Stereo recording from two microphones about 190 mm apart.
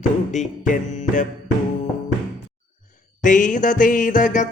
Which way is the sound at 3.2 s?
40° left (ahead or behind).